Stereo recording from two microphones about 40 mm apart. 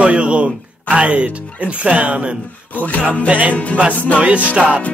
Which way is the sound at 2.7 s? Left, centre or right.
Left.